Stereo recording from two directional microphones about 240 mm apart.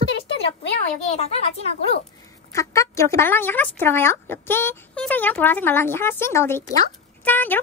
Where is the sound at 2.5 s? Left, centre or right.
Centre.